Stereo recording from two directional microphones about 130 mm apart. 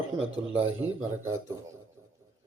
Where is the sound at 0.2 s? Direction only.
10° right (ahead or behind).